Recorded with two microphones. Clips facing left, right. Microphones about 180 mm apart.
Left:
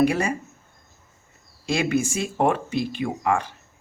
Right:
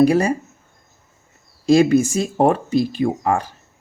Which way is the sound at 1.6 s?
40° right (ahead or behind).